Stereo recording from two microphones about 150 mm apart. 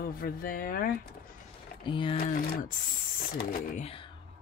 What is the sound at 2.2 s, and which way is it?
Speech, 80° left.